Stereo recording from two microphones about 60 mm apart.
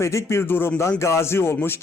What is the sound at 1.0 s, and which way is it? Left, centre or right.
Speech, left.